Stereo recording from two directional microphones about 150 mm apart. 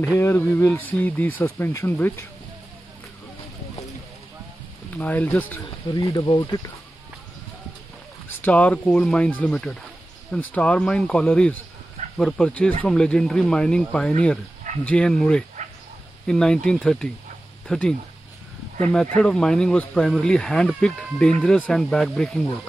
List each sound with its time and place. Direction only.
0.0 s speech: 15° left (ahead or behind)
4.9 s speech: 10° left (ahead or behind)
5.9 s speech: 30° left (ahead or behind)
8.4 s speech: 10° left (ahead or behind)
18.9 s speech: 5° left (ahead or behind)